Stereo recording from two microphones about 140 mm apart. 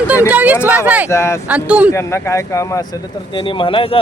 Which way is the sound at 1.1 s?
20° left (ahead or behind).